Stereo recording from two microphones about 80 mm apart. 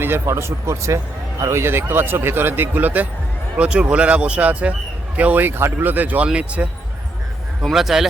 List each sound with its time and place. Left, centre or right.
0.0 s speech: right; by 6.7 s centre
7.6 s a man's voice: centre